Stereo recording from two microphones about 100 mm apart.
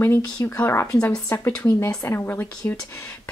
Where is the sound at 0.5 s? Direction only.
20° left (ahead or behind).